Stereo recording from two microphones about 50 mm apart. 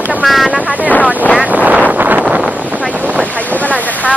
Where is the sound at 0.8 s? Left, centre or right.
Left.